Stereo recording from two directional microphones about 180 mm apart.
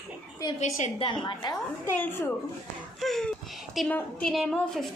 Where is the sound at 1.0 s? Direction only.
25° left (ahead or behind).